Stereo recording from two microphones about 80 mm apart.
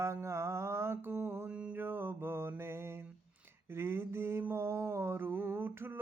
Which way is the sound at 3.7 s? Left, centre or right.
Right.